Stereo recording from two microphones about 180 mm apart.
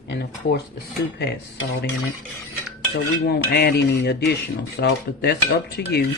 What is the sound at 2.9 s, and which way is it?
Speech, 65° left (ahead or behind).